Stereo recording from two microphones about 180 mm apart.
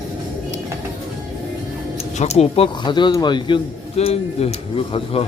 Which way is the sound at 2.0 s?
35° left (ahead or behind).